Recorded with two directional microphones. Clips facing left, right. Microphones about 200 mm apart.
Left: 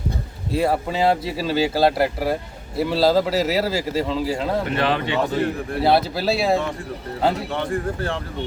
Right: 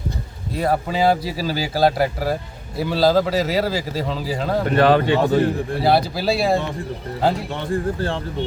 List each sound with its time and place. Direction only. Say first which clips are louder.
0.5 s speech: even; centre (ahead or behind)
4.7 s a man's voice: right 6 dB; 45° right (ahead or behind)
5.8 s speech: even; centre (ahead or behind)
7.7 s speech: right 2 dB; 30° right (ahead or behind)